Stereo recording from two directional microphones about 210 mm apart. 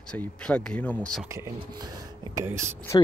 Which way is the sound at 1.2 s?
15° right (ahead or behind).